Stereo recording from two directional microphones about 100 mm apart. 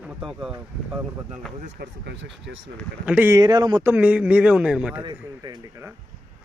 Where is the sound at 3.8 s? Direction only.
20° right (ahead or behind).